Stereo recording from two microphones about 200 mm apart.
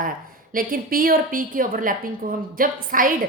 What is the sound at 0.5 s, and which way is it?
A woman's voice, 45° right (ahead or behind).